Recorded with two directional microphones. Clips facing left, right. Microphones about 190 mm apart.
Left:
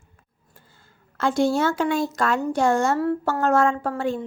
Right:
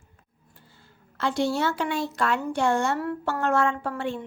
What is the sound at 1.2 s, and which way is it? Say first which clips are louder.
Speech: left 4 dB; 45° left (ahead or behind).